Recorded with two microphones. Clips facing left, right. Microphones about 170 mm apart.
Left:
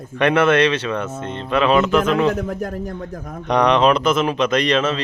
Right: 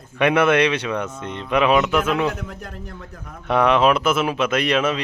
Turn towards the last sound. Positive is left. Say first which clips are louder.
# left 2 dB
turn(degrees=-10)  # may be behind; listen again after turning